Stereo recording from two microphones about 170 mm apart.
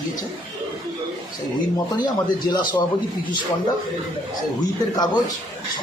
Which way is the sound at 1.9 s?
25° left (ahead or behind).